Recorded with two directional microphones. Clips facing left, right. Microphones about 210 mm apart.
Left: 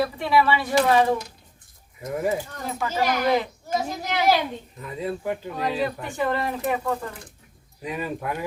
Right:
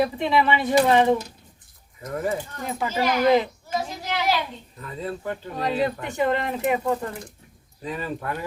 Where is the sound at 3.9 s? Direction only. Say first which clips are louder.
Left 5 dB; 45° left (ahead or behind).